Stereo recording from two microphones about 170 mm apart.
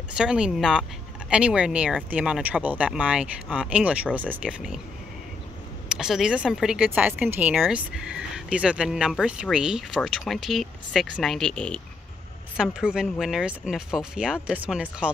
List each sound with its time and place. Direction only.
0.1 s speech: 5° right (ahead or behind)
5.9 s speech: 5° right (ahead or behind)
12.5 s speech: 5° right (ahead or behind)